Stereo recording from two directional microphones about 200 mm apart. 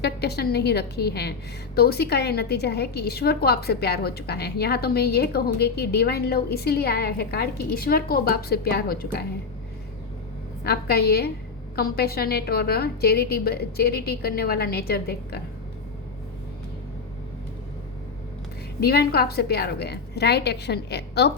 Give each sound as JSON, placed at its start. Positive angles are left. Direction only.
{"t": 0.0, "sound": "a woman's voice", "side_deg": 55}
{"t": 10.6, "sound": "a woman's voice", "side_deg": 55}
{"t": 18.8, "sound": "a woman's voice", "side_deg": 50}